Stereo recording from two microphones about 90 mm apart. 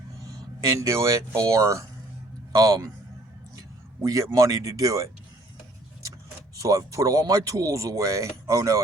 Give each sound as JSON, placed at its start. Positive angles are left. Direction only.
{"t": 0.6, "sound": "speech", "side_deg": -40}
{"t": 4.0, "sound": "speech", "side_deg": -35}
{"t": 6.6, "sound": "speech", "side_deg": -40}